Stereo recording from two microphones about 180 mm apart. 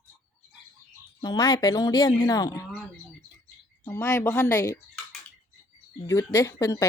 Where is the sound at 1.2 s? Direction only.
20° left (ahead or behind).